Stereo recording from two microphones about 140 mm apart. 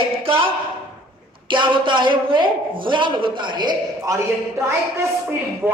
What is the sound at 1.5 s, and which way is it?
A man's voice, 35° right (ahead or behind).